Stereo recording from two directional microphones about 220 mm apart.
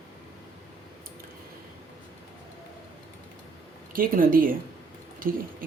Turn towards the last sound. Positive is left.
turn(degrees=-40)  # may be behind; listen again after turning